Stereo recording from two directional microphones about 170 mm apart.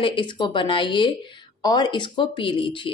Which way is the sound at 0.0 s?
30° left (ahead or behind).